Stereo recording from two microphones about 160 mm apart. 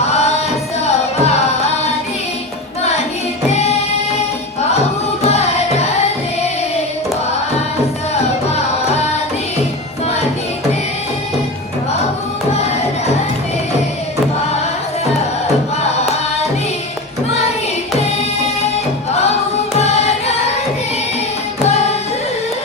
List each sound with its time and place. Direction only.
0.0 s music: 45° left (ahead or behind)
3.5 s music: 40° left (ahead or behind)
5.2 s music: 40° left (ahead or behind)
19.8 s music: 45° left (ahead or behind)